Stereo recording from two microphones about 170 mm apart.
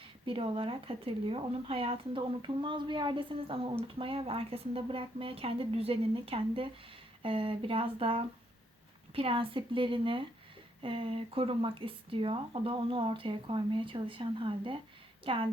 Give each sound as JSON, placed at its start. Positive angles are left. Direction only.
{"t": 0.3, "sound": "a woman's voice", "side_deg": -30}